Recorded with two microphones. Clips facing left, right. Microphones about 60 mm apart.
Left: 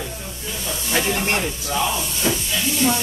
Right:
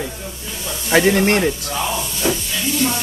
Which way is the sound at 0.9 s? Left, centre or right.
Right.